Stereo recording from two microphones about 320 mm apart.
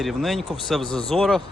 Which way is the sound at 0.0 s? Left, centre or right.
Centre.